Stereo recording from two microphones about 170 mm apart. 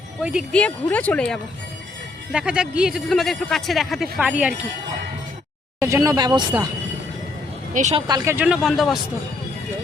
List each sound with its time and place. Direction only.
0.2 s speech: 5° right (ahead or behind)
0.5 s speech: 10° left (ahead or behind)
2.3 s speech: 5° right (ahead or behind)
5.8 s speech: 20° right (ahead or behind)
7.7 s speech: 45° right (ahead or behind)
7.9 s speech: 25° right (ahead or behind)
8.6 s speech: centre (ahead or behind)